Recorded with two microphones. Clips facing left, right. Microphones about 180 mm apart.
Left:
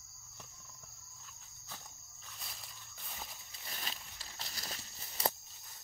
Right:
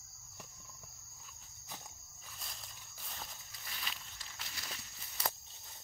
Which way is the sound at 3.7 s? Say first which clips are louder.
Left 2 dB; 40° left (ahead or behind).